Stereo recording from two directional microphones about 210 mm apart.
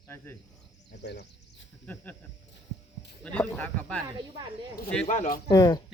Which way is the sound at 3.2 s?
5° left (ahead or behind).